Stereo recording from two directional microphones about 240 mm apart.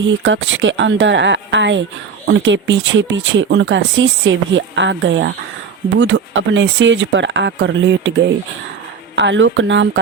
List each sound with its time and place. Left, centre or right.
0.3 s speech: right